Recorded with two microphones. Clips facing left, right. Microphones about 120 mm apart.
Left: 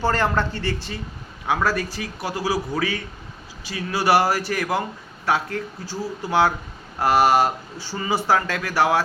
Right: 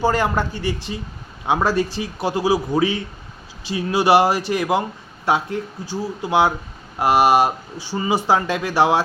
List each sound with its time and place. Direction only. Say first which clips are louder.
0.0 s speech: right 2 dB; 15° right (ahead or behind)